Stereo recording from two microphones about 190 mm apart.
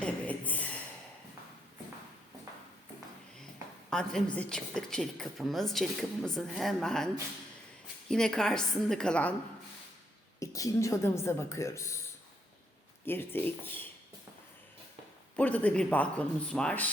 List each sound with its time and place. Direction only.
0.0 s a sound: 10° left (ahead or behind)
3.8 s a woman's voice: 5° left (ahead or behind)
8.1 s a woman's voice: 5° left (ahead or behind)
10.4 s speech: 15° left (ahead or behind)
13.1 s speech: 10° left (ahead or behind)
15.4 s speech: 5° left (ahead or behind)